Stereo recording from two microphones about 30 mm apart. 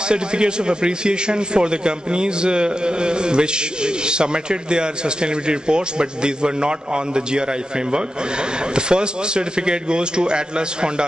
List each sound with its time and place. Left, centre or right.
0.1 s a man's voice: right